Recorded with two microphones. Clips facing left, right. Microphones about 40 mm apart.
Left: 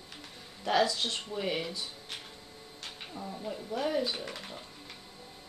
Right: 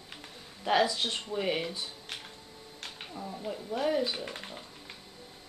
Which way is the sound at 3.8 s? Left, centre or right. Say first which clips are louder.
Right 2 dB; centre.